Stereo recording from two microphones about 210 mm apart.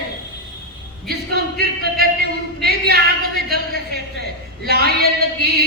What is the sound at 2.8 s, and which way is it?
Speech, 45° right (ahead or behind).